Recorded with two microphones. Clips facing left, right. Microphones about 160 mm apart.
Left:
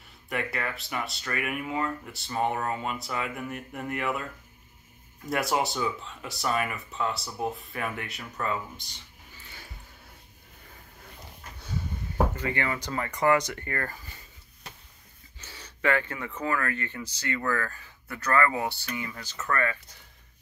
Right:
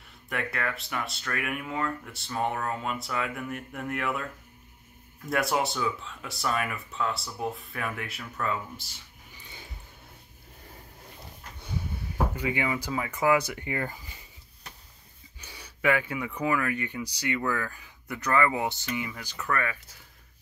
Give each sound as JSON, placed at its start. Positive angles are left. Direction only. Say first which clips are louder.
{"t": 0.3, "sound": "speech", "louder": "even", "side_deg": 0}
{"t": 9.3, "sound": "a sound", "louder": "right 1 dB", "side_deg": -15}
{"t": 11.6, "sound": "speech", "louder": "even", "side_deg": -10}
{"t": 15.3, "sound": "speech", "louder": "even", "side_deg": -15}